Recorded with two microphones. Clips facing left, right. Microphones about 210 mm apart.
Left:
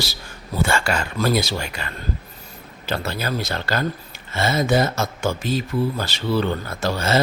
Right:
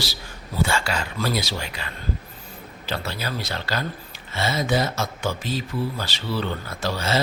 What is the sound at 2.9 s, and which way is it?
Speech, 50° left (ahead or behind).